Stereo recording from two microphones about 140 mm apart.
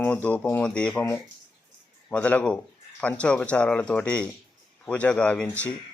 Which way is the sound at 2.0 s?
10° left (ahead or behind).